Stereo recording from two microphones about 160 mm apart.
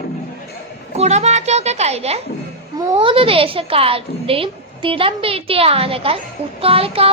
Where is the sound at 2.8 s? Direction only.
30° right (ahead or behind).